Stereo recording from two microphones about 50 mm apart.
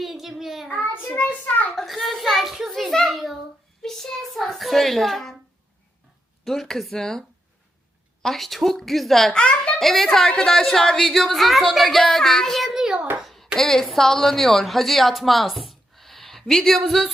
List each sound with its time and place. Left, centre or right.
0.0 s child singing: centre
1.7 s speech: centre
6.4 s speech: centre
9.3 s a child's voice: centre
9.8 s speech: centre
10.2 s speech: centre
12.6 s a child's voice: centre
13.2 s a sound: centre
13.6 s a woman's voice: centre